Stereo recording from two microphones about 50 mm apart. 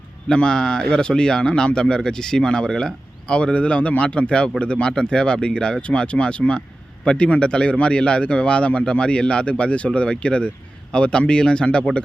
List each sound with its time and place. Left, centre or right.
0.3 s speech: centre